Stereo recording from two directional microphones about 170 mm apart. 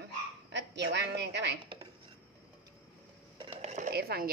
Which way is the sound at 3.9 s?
65° right (ahead or behind).